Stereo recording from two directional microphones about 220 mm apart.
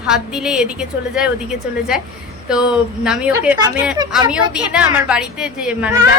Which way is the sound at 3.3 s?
15° right (ahead or behind).